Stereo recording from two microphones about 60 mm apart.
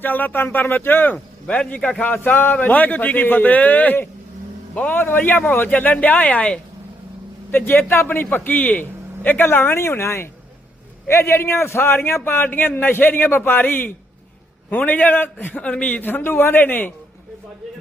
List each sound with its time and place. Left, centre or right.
0.0 s a man's voice: left
1.1 s speech: left
2.1 s a man's voice: left
4.9 s speech: left
7.5 s a man's voice: left
15.6 s a man's voice: left